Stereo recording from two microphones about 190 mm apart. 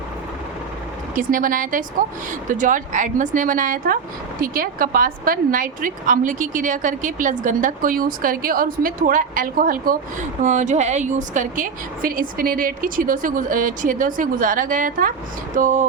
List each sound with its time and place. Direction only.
1.1 s a woman's voice: 45° right (ahead or behind)